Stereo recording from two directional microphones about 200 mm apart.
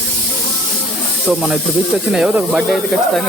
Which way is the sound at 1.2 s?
Centre (ahead or behind).